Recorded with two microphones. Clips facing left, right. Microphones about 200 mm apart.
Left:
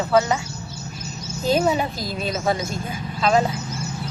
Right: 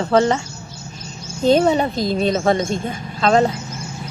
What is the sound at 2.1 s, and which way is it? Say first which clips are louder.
Speech: right 8 dB; 30° right (ahead or behind).